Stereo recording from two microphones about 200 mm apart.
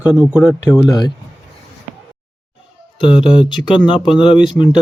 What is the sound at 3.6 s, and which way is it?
Speech, 10° left (ahead or behind).